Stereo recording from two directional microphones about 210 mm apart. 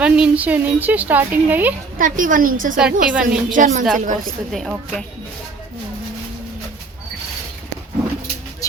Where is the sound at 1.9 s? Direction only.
40° right (ahead or behind).